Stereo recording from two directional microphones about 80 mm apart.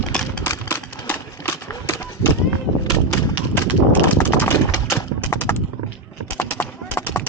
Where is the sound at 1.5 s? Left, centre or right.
Left.